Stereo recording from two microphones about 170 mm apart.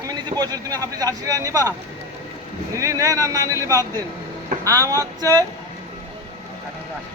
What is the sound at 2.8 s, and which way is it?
A man's voice, 20° right (ahead or behind).